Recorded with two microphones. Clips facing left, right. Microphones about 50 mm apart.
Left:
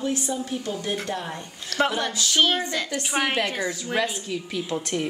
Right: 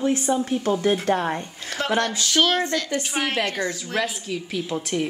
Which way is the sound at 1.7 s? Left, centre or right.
Right.